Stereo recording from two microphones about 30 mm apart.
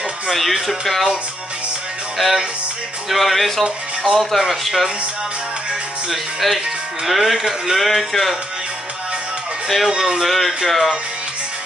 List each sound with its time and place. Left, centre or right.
0.3 s speech: centre
2.1 s music: centre
3.1 s speech: centre
6.0 s speech: centre
9.9 s speech: centre
10.2 s speech: centre